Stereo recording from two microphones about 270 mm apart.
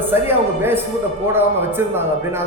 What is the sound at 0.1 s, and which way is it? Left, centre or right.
A man's voice, centre.